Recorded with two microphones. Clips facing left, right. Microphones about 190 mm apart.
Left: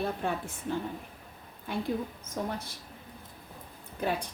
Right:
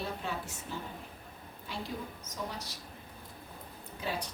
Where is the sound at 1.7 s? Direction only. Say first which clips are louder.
Left 8 dB; 55° left (ahead or behind).